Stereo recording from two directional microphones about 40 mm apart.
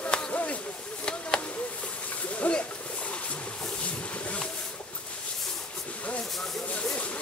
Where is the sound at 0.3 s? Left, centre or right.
Left.